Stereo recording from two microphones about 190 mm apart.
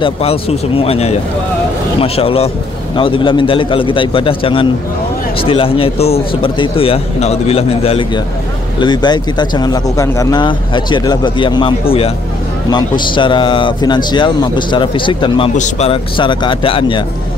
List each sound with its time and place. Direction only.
0.0 s speech: 30° left (ahead or behind)
15.5 s speech: 35° left (ahead or behind)